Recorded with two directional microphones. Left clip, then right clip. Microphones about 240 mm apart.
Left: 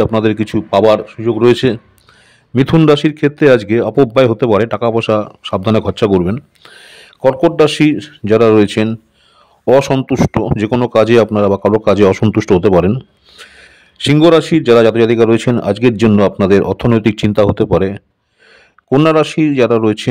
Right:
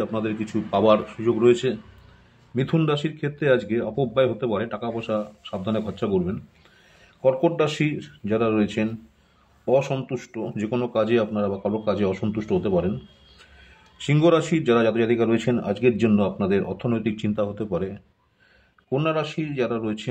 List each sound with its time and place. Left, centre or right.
0.0 s speech: left
1.4 s a man's voice: left